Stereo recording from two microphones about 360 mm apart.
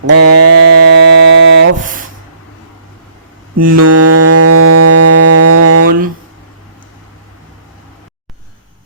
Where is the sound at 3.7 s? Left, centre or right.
Right.